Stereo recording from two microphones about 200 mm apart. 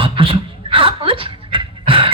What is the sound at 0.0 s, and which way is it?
Dog, 25° right (ahead or behind).